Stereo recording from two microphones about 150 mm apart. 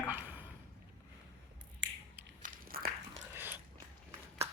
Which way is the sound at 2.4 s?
75° right (ahead or behind).